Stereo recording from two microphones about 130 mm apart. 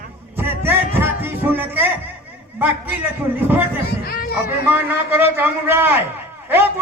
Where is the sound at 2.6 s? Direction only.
15° right (ahead or behind).